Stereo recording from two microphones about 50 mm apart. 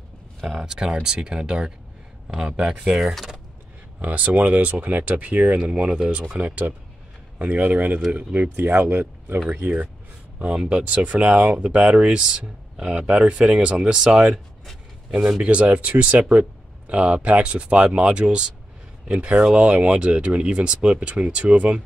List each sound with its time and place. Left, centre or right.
0.6 s speech: centre
4.0 s speech: right
10.6 s speech: right
15.4 s speech: right